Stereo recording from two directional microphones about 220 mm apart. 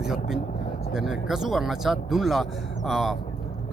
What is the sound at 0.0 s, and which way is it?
Speech, centre (ahead or behind).